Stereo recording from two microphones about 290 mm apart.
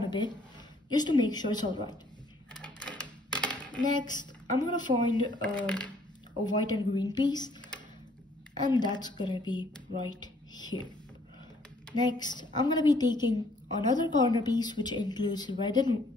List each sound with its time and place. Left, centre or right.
0.0 s a woman's voice: centre
2.6 s typewriter: centre
3.8 s a woman's voice: centre
5.4 s speech: centre
6.4 s a woman's voice: centre
8.5 s a woman's voice: centre
10.0 s a sound: centre
12.1 s a woman's voice: centre